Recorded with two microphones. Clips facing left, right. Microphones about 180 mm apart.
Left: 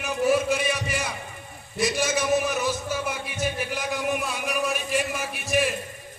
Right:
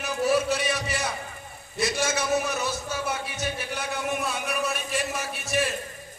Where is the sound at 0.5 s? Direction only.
15° left (ahead or behind).